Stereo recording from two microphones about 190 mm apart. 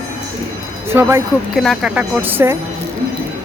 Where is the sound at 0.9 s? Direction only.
10° right (ahead or behind).